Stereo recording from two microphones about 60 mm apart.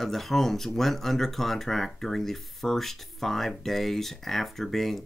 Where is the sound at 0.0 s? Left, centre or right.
Centre.